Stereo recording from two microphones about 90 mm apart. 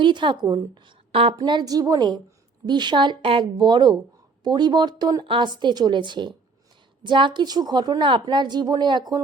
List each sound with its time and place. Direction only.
0.0 s a woman's voice: 65° right (ahead or behind); by 1.4 s 80° right
1.5 s a woman's voice: 50° right (ahead or behind)
5.2 s a woman's voice: 65° right (ahead or behind)